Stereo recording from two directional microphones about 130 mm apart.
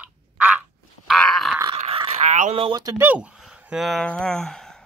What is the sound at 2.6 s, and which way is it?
Speech, 35° right (ahead or behind).